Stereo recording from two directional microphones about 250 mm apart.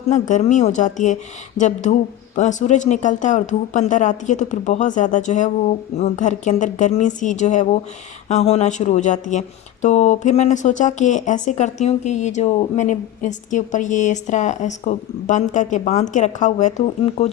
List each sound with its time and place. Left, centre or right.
0.1 s speech: left